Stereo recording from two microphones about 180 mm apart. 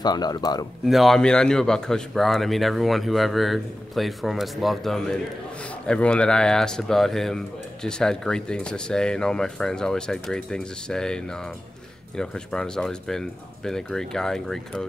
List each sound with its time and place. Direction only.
0.0 s speech: 20° left (ahead or behind)
0.8 s speech: centre (ahead or behind)